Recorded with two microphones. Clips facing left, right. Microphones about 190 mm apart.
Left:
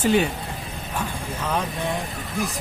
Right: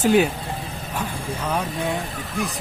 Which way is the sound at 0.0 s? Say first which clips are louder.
Right 3 dB; 5° right (ahead or behind).